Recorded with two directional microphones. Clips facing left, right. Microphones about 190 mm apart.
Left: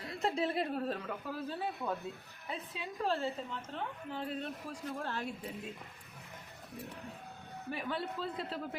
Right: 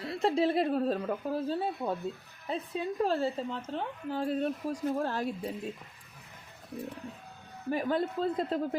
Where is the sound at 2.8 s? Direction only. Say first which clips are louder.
Right 6 dB; 45° right (ahead or behind).